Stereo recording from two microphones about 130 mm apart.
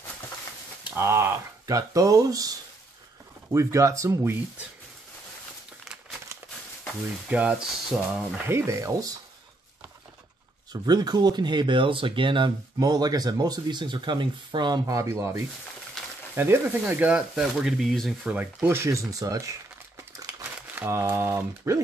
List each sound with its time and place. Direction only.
0.8 s speech: 20° right (ahead or behind)
3.5 s speech: 25° right (ahead or behind)
7.2 s speech: 10° right (ahead or behind)
8.5 s speech: 20° right (ahead or behind)
10.7 s speech: 30° right (ahead or behind)
20.7 s speech: 20° right (ahead or behind)